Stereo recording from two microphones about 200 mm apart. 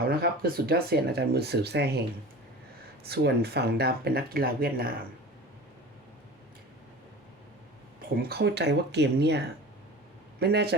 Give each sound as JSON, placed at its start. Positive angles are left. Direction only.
{"t": 0.1, "sound": "speech", "side_deg": -50}
{"t": 3.1, "sound": "speech", "side_deg": -50}
{"t": 8.1, "sound": "speech", "side_deg": -50}
{"t": 10.4, "sound": "speech", "side_deg": -55}